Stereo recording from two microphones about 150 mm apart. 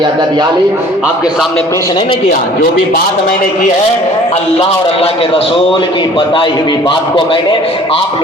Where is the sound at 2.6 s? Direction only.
70° left (ahead or behind).